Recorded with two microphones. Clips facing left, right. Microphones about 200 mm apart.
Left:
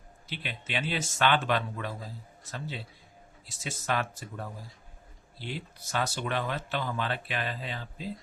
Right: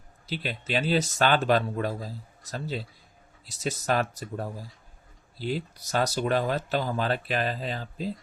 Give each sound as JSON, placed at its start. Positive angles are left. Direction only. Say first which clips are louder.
{"t": 0.3, "sound": "speech", "louder": "right 7 dB", "side_deg": -40}